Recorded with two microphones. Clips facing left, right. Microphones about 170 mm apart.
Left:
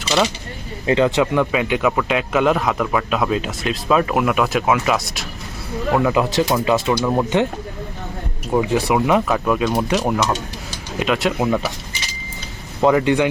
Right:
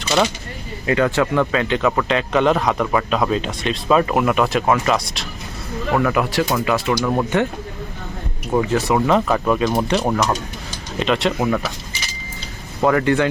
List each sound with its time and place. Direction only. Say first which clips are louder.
0.9 s speech: left 1 dB; 20° left (ahead or behind); by 5.0 s 5° left (ahead or behind)
5.9 s speech: left 1 dB; 20° left (ahead or behind)
8.6 s speech: even; 15° left (ahead or behind)
12.8 s speech: left 1 dB; 15° left (ahead or behind)